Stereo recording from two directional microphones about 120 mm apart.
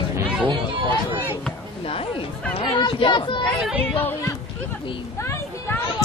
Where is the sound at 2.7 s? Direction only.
45° left (ahead or behind).